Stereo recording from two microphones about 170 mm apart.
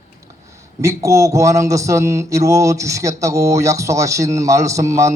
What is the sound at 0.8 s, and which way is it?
Mantra, 15° right (ahead or behind).